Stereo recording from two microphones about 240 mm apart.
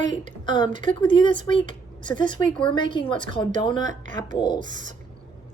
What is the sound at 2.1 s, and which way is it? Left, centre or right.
Speech, centre.